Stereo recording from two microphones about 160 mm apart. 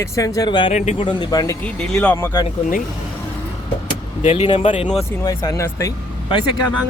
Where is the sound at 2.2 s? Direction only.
15° left (ahead or behind).